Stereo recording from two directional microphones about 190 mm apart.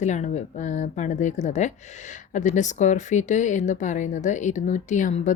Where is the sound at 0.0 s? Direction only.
40° left (ahead or behind).